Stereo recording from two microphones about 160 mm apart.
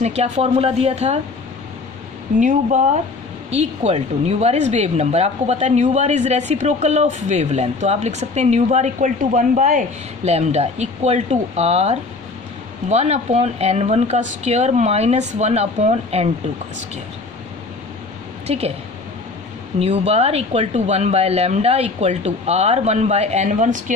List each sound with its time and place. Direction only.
0.0 s a woman's voice: 45° right (ahead or behind)
2.4 s speech: 55° right (ahead or behind)
3.5 s speech: 40° right (ahead or behind)
18.5 s a woman's voice: 40° right (ahead or behind)
19.8 s speech: 40° right (ahead or behind)